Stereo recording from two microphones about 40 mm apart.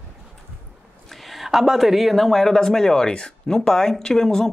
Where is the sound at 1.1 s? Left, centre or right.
Centre.